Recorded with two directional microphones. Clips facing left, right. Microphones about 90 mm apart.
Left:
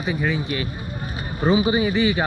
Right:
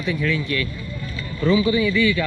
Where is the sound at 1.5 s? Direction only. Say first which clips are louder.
Right 1 dB; 25° left (ahead or behind).